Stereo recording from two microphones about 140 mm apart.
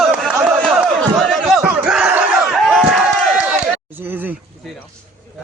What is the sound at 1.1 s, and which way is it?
Battle cry, centre (ahead or behind).